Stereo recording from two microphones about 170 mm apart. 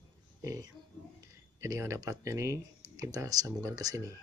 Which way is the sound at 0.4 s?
20° right (ahead or behind).